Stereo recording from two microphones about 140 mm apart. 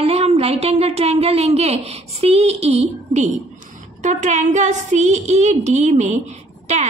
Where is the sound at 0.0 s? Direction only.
45° right (ahead or behind).